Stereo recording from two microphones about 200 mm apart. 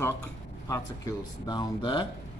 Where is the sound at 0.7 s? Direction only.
15° left (ahead or behind).